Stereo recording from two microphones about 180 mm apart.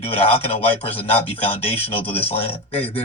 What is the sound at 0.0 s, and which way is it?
Speech, 35° left (ahead or behind).